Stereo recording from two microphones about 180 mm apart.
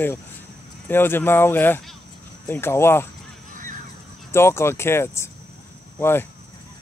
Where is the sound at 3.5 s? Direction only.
45° right (ahead or behind).